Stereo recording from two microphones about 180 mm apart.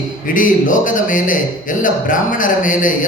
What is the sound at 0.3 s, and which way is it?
Speech, 45° left (ahead or behind).